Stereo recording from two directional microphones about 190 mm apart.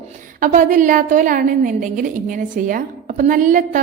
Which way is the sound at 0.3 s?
45° right (ahead or behind).